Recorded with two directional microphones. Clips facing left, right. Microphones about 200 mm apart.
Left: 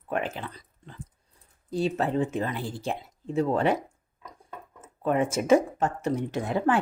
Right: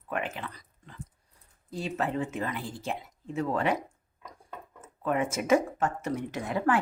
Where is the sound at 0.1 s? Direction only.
35° left (ahead or behind).